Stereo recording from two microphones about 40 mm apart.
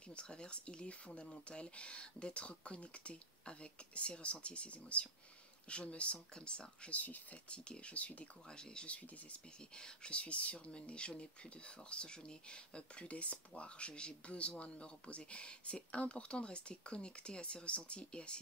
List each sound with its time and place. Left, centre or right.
0.1 s speech: left
6.9 s speech: left
7.9 s speech: left
8.5 s speech: centre
8.8 s speech: left
9.8 s speech: left